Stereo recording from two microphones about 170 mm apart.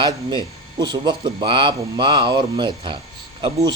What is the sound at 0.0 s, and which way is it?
A man's voice, 25° right (ahead or behind).